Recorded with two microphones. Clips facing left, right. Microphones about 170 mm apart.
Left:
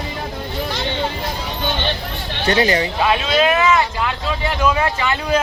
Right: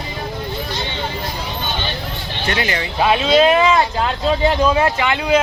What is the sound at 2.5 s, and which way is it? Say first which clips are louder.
Speech: left 6 dB; 35° left (ahead or behind).